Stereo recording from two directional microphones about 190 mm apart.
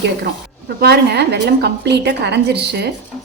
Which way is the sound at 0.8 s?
60° right (ahead or behind).